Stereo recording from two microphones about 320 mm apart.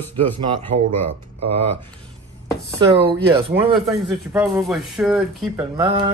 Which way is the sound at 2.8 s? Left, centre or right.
Centre.